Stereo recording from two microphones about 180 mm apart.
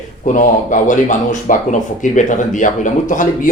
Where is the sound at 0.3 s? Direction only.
45° left (ahead or behind).